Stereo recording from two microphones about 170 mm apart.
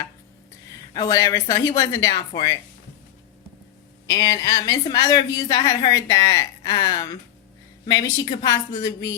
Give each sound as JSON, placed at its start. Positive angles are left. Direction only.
{"t": 0.9, "sound": "speech", "side_deg": 20}
{"t": 4.0, "sound": "a woman's voice", "side_deg": 20}